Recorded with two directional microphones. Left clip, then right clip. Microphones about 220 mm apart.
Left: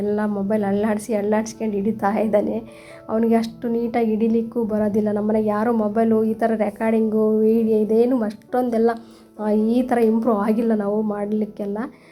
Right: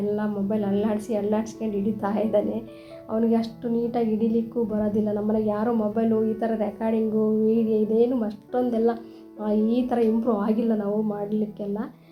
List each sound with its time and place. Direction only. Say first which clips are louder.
0.1 s a woman's voice: left 5 dB; 35° left (ahead or behind)